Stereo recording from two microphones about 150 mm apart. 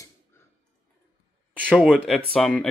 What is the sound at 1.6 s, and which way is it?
Speech, 5° right (ahead or behind).